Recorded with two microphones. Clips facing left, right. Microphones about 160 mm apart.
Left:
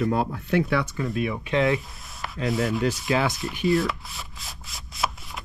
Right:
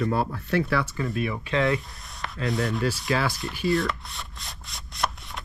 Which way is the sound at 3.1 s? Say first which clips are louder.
Left 2 dB; 20° left (ahead or behind).